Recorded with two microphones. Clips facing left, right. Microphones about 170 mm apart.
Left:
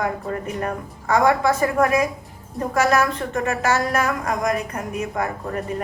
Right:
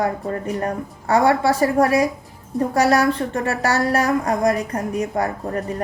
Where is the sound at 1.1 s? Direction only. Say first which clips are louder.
Right 1 dB; 35° right (ahead or behind).